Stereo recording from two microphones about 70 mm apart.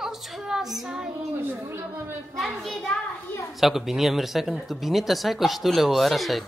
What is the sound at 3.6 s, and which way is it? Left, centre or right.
Speech, centre.